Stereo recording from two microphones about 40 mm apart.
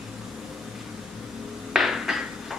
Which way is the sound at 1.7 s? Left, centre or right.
Centre.